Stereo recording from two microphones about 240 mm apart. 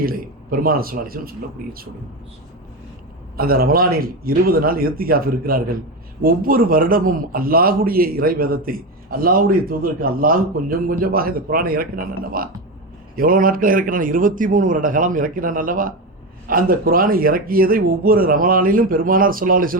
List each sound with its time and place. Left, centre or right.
0.0 s a man's voice: right
3.3 s a man's voice: right